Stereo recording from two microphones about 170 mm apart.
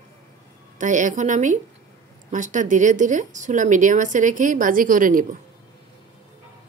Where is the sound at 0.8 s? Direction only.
50° right (ahead or behind).